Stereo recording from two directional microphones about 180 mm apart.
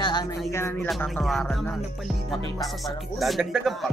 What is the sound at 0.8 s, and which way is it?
Music, centre (ahead or behind).